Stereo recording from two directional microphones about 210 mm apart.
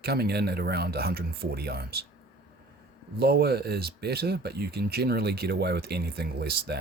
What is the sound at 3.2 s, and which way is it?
Speech, 50° right (ahead or behind).